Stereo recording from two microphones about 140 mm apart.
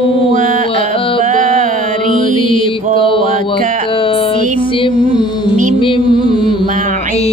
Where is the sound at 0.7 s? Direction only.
40° left (ahead or behind).